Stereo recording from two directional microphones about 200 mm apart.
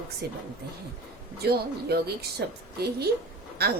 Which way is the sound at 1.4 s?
50° right (ahead or behind).